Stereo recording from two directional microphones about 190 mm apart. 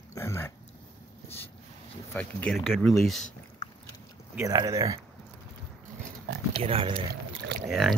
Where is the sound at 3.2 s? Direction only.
30° left (ahead or behind).